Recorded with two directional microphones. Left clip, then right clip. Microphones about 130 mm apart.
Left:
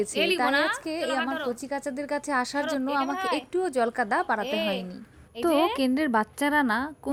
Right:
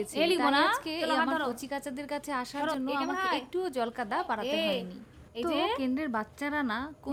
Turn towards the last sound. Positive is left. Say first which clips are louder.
# left 7 dB
turn(degrees=30)  # may be behind; listen again after turning